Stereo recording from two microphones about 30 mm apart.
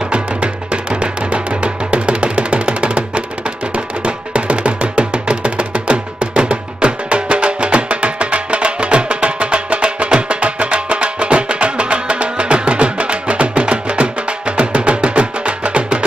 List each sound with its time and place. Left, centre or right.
1.3 s music: right
4.0 s music: right